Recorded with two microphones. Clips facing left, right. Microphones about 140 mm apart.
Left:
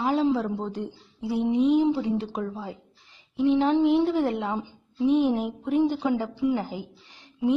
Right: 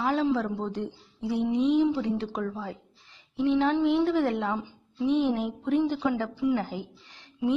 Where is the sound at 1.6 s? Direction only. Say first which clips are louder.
Left 2 dB; 40° left (ahead or behind).